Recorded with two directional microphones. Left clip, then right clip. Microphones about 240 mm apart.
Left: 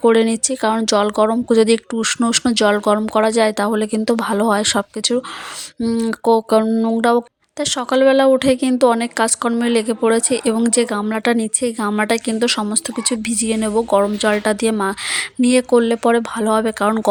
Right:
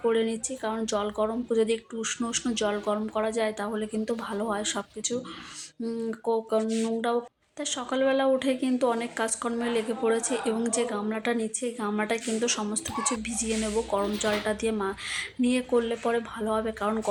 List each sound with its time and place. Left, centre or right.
0.0 s speech: left